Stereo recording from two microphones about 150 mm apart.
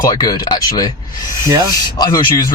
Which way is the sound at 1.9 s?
30° left (ahead or behind).